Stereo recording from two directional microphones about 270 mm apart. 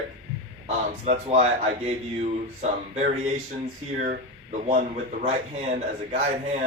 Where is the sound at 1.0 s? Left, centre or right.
Right.